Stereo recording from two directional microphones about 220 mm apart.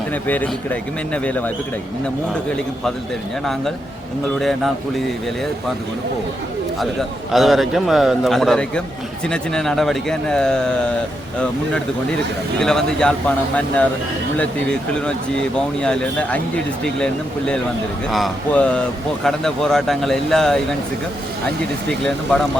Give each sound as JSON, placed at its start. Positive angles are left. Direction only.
{"t": 0.1, "sound": "speech", "side_deg": 5}
{"t": 4.4, "sound": "a man's voice", "side_deg": 0}
{"t": 7.3, "sound": "a man's voice", "side_deg": 0}
{"t": 12.5, "sound": "a man's voice", "side_deg": 5}
{"t": 15.0, "sound": "a man's voice", "side_deg": 5}
{"t": 21.8, "sound": "a man's voice", "side_deg": 0}